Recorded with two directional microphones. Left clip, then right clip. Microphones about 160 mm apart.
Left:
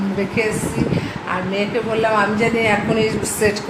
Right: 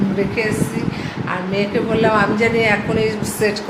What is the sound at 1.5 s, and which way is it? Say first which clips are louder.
A woman's voice: right 3 dB; centre (ahead or behind).